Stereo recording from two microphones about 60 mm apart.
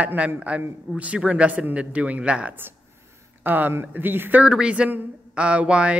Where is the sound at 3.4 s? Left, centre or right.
Right.